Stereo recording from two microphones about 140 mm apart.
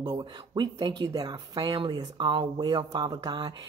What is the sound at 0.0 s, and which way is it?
Speech, 30° right (ahead or behind).